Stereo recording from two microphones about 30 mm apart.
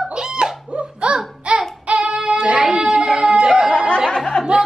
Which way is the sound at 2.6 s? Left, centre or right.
Right.